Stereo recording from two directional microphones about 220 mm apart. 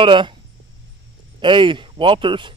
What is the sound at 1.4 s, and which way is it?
Speech, 20° right (ahead or behind).